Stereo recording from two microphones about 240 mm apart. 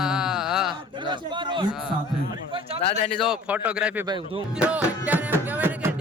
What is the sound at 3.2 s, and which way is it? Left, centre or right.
Speech, centre.